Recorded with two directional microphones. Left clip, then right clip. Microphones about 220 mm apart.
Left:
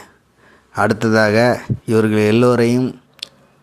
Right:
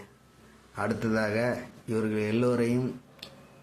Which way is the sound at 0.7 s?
45° left (ahead or behind).